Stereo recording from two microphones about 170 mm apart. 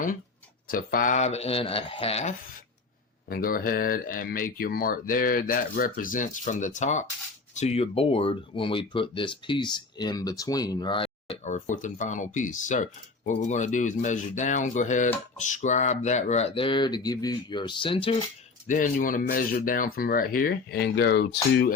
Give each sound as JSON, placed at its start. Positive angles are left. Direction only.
{"t": 0.7, "sound": "speech", "side_deg": 55}
{"t": 3.2, "sound": "speech", "side_deg": 60}
{"t": 18.7, "sound": "speech", "side_deg": 50}